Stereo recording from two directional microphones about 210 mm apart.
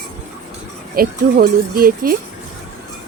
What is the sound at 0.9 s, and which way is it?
Speech, 45° right (ahead or behind).